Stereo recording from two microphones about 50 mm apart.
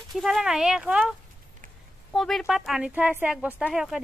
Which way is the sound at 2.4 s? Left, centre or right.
Centre.